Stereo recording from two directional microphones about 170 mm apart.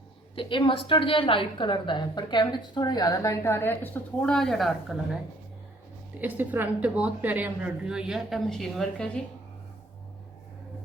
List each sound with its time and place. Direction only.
0.3 s a woman's voice: 30° left (ahead or behind); by 9.0 s 5° left (ahead or behind)